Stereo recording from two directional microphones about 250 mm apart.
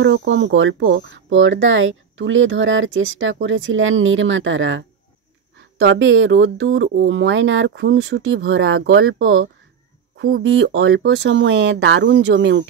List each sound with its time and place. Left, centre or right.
0.0 s speech: right
10.1 s speech: right